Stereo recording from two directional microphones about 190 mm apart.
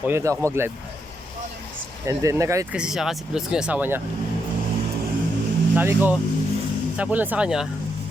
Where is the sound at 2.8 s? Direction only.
5° right (ahead or behind).